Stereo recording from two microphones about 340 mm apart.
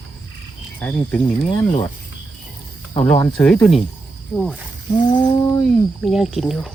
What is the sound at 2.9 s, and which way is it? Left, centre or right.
Speech, centre.